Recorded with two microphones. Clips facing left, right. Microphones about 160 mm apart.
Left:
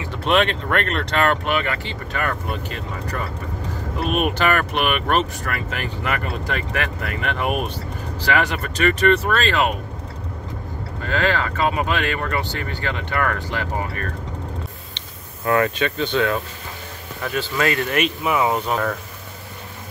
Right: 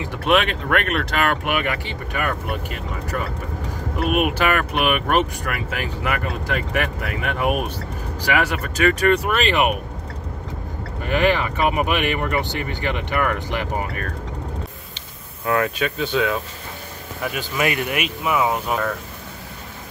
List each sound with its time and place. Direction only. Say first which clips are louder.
0.1 s speech: even; 10° right (ahead or behind)
11.1 s speech: right 2 dB; 15° right (ahead or behind)
15.0 s speech: left 1 dB; centre (ahead or behind)